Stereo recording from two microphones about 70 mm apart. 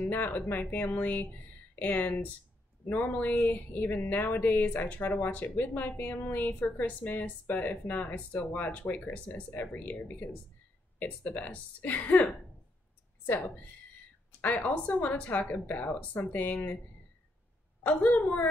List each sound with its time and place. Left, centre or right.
0.0 s a woman's voice: left
17.8 s speech: left